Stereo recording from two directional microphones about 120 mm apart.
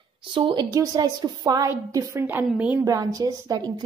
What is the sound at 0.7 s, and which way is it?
A woman's voice, 30° right (ahead or behind).